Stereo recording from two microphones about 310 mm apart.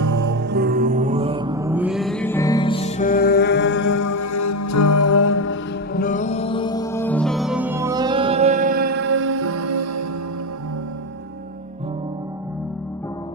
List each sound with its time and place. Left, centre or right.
0.0 s music: right
0.3 s music: right; by 3.8 s left
3.8 s music: left
5.9 s music: left; by 10.0 s right